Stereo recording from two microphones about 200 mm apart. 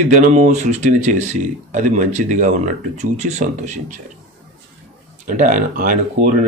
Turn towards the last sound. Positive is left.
turn(degrees=-40)  # may be behind; listen again after turning